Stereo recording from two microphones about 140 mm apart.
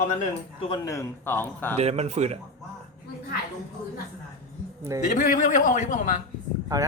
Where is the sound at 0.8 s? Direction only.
20° left (ahead or behind).